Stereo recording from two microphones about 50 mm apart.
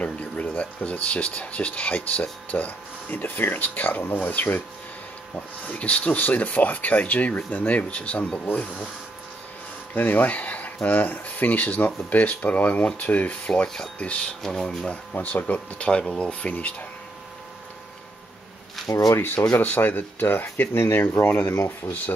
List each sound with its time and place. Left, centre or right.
0.0 s speech: left
5.7 s speech: left
9.9 s speech: left
14.4 s speech: centre
15.1 s speech: left
15.5 s speech: centre
18.9 s speech: left
19.5 s speech: left